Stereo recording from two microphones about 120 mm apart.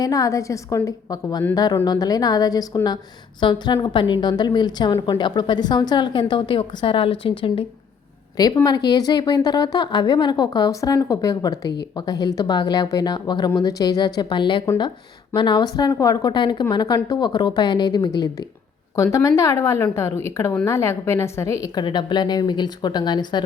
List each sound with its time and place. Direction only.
0.0 s a woman's voice: 30° left (ahead or behind); by 7.6 s 45° left (ahead or behind)
8.4 s a woman's voice: 35° left (ahead or behind)
21.8 s a woman's voice: 40° left (ahead or behind)